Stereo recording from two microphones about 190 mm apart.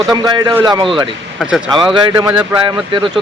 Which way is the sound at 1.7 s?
25° right (ahead or behind).